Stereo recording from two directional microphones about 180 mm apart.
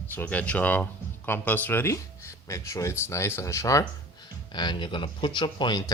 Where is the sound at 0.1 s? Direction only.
10° left (ahead or behind).